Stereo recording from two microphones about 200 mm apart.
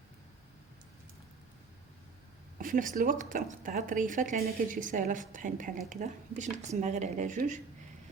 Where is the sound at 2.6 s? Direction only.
40° right (ahead or behind).